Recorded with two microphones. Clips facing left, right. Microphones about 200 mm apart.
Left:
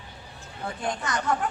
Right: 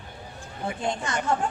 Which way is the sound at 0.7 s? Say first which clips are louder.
Right 1 dB; 25° right (ahead or behind).